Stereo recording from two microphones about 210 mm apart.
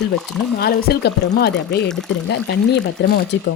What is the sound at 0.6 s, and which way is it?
Speech, 50° left (ahead or behind).